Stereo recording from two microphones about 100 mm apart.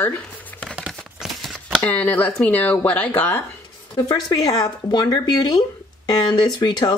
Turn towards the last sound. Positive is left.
turn(degrees=50)  # may be behind; listen again after turning